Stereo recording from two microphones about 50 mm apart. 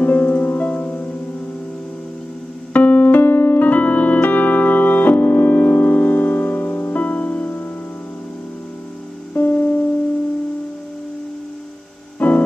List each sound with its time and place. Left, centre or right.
0.0 s music: left
2.7 s keyboard: left
9.3 s music: left
12.2 s music: left